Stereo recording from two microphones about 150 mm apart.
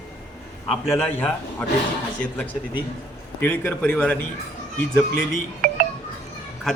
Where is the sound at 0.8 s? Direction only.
10° left (ahead or behind).